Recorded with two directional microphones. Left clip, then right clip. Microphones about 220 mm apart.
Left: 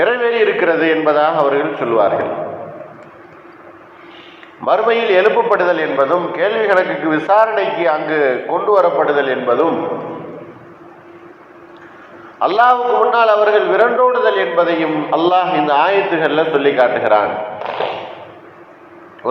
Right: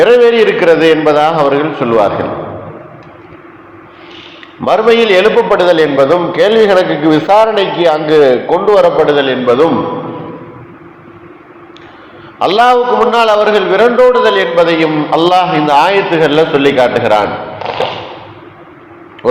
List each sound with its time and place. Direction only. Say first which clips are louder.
0.0 s a man's voice: right 8 dB; 50° right (ahead or behind)
4.6 s a man's voice: right 6 dB; 45° right (ahead or behind)
12.4 s a man's voice: right 4 dB; 50° right (ahead or behind)